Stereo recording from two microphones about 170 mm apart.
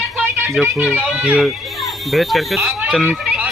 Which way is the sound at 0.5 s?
Centre (ahead or behind).